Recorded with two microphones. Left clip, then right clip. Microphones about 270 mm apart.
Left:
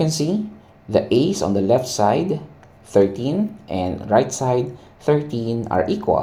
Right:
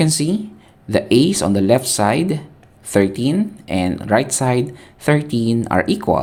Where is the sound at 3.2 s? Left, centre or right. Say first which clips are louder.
Right 3 dB; right.